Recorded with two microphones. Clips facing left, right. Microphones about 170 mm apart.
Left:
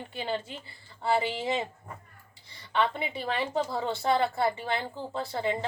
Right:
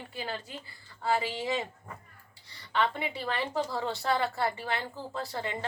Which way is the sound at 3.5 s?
25° left (ahead or behind).